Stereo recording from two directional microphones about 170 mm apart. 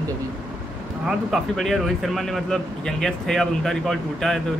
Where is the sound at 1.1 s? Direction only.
Centre (ahead or behind).